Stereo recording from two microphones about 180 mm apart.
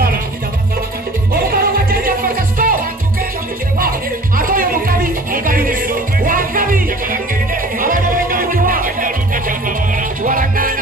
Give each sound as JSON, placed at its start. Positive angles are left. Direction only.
{"t": 1.3, "sound": "music", "side_deg": -55}
{"t": 4.4, "sound": "music", "side_deg": -50}